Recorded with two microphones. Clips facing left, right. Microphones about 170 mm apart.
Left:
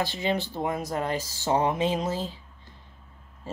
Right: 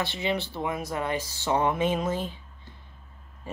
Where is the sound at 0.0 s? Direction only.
45° left (ahead or behind).